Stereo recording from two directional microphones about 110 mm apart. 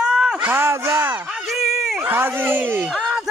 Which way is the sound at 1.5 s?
Centre (ahead or behind).